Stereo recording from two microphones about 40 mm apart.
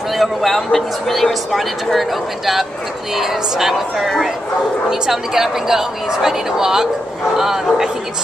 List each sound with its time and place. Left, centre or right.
0.1 s a woman's voice: centre